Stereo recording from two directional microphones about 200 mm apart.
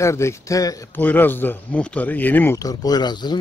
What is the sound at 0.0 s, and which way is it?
Speech, 15° left (ahead or behind).